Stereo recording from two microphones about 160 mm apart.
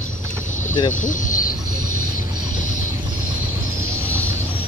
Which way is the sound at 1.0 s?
55° left (ahead or behind).